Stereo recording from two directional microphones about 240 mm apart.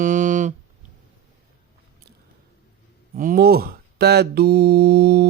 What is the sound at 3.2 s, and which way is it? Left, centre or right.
Mantra, right.